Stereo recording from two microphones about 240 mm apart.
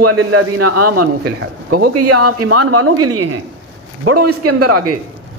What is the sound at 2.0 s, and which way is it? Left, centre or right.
Speech, right.